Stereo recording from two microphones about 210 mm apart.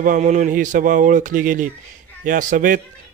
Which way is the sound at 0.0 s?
35° right (ahead or behind).